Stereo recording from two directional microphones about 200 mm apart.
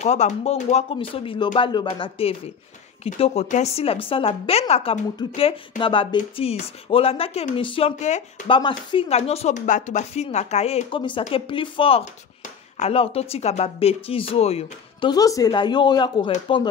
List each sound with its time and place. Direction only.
0.0 s a woman's voice: 35° left (ahead or behind)